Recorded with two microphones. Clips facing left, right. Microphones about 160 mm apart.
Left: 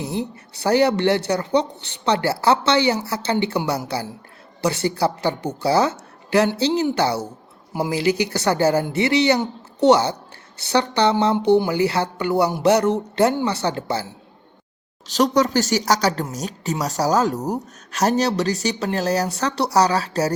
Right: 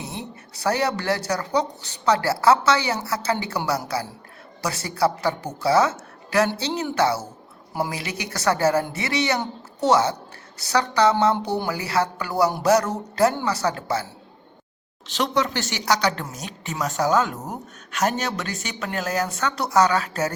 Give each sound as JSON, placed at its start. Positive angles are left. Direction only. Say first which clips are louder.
{"t": 0.5, "sound": "speech", "louder": "left 6 dB", "side_deg": 30}
{"t": 15.0, "sound": "speech", "louder": "left 5 dB", "side_deg": 40}